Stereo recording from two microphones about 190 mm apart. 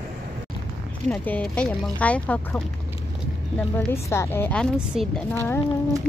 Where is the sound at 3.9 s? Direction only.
15° left (ahead or behind).